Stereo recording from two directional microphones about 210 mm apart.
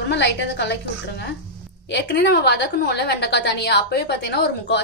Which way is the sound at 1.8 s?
55° left (ahead or behind).